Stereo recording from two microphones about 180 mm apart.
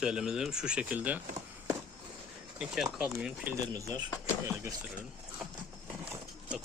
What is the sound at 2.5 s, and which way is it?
Speech, 5° right (ahead or behind).